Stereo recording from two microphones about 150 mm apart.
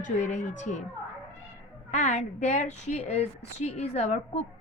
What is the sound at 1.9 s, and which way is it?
A woman's voice, 50° left (ahead or behind).